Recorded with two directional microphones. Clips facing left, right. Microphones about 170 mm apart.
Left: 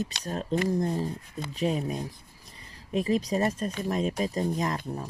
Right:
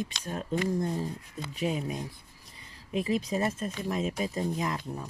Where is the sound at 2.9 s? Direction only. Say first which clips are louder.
Left 3 dB; 40° left (ahead or behind).